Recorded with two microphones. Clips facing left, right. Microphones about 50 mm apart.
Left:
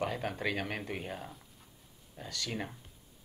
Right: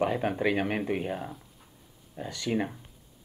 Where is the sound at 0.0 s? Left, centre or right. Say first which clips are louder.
Right 7 dB; centre.